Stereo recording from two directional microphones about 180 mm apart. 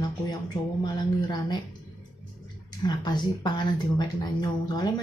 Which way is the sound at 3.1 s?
25° left (ahead or behind).